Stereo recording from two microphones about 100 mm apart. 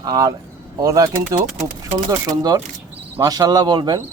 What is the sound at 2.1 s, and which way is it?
Speech, 40° right (ahead or behind).